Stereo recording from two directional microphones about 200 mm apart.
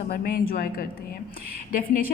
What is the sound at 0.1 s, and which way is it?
A woman's voice, 45° left (ahead or behind).